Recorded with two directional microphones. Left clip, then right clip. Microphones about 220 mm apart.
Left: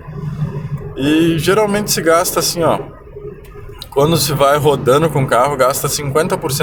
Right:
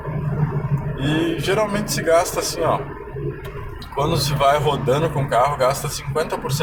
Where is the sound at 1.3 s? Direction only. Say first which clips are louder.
Left 6 dB; 40° left (ahead or behind).